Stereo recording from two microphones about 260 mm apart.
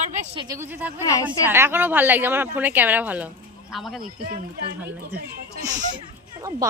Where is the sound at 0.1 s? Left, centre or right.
Right.